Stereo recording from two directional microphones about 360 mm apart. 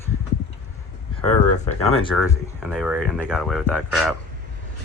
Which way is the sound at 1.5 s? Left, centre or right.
Centre.